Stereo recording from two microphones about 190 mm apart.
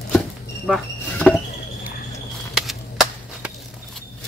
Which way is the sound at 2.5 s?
Centre (ahead or behind).